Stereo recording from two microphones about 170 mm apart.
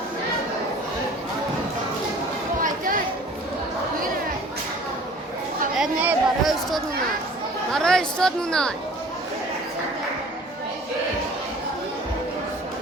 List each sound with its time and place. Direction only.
2.6 s a sound: 50° right (ahead or behind)
5.7 s a woman's voice: 5° right (ahead or behind)
7.7 s a woman's voice: 5° left (ahead or behind)